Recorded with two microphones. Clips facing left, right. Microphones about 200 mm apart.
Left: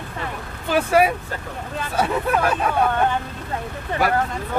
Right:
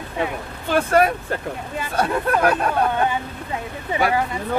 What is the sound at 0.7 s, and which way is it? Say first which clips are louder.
Speech: even; 5° left (ahead or behind).